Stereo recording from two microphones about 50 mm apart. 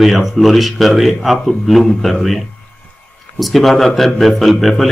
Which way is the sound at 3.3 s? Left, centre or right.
Centre.